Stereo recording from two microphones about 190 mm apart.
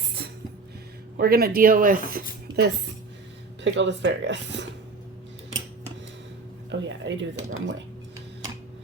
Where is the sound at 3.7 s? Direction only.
70° right (ahead or behind).